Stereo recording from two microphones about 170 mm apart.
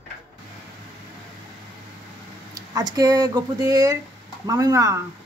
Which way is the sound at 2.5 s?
25° right (ahead or behind).